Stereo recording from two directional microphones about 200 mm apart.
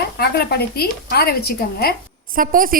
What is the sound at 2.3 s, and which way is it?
Speech, 45° right (ahead or behind).